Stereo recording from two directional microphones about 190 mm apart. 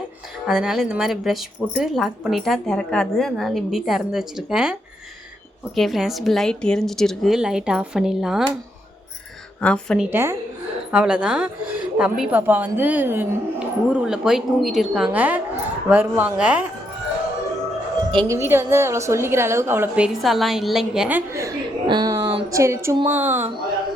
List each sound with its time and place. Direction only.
0.4 s speech: 5° right (ahead or behind)
9.6 s speech: 5° left (ahead or behind)
10.1 s speech: 15° right (ahead or behind)
18.1 s a woman's voice: 25° right (ahead or behind)
18.3 s speech: 10° right (ahead or behind)
20.2 s a woman's voice: centre (ahead or behind); by 22.4 s 25° right (ahead or behind)
22.4 s speech: 15° right (ahead or behind)